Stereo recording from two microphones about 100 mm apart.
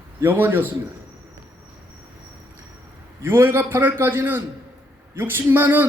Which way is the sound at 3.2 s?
25° right (ahead or behind).